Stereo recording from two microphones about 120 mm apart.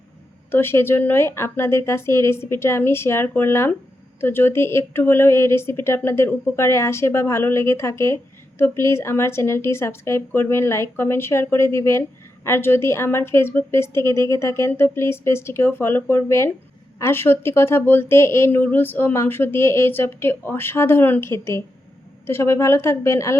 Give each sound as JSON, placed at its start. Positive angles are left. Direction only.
{"t": 0.5, "sound": "a woman's voice", "side_deg": 20}